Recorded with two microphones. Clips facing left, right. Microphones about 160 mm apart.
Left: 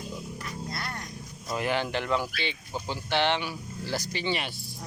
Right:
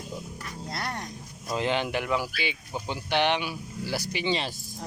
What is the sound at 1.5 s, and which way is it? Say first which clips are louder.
Speech: right 1 dB; 20° right (ahead or behind).